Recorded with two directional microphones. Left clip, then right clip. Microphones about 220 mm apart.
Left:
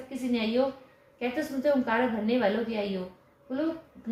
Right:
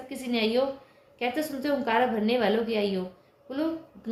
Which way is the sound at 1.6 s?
40° right (ahead or behind).